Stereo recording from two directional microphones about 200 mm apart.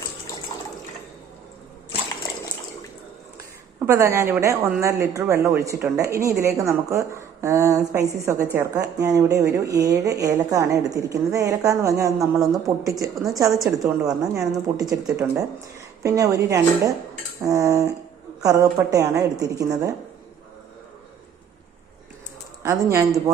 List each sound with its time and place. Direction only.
3.8 s speech: 15° right (ahead or behind)
22.6 s speech: 15° right (ahead or behind)